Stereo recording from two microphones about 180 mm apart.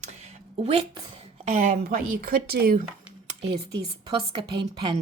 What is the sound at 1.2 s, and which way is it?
A woman's voice, 35° right (ahead or behind).